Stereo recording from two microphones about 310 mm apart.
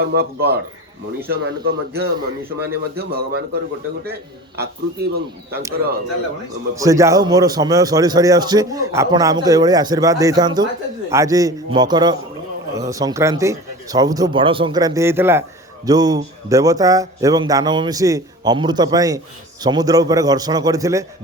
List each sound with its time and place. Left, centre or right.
0.0 s a man's voice: right
6.7 s a man's voice: centre